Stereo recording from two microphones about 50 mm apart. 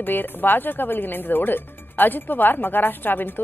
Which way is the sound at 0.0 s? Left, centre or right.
Left.